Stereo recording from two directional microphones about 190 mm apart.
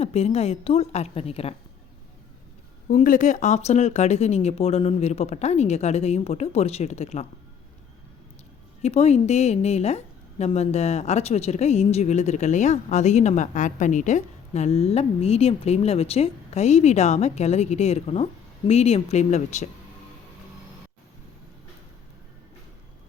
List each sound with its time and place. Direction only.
0.0 s a woman's voice: 35° left (ahead or behind)
2.9 s a woman's voice: 45° left (ahead or behind)
8.8 s a woman's voice: 35° left (ahead or behind)